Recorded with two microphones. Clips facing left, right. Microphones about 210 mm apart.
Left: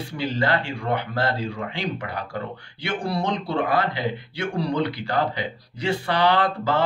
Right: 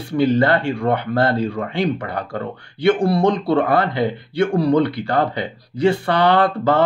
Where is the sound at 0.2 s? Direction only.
55° right (ahead or behind).